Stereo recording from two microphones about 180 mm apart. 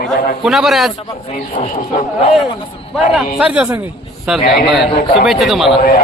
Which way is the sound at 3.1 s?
5° right (ahead or behind).